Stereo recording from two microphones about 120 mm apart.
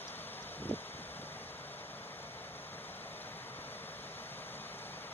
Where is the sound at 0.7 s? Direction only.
15° left (ahead or behind).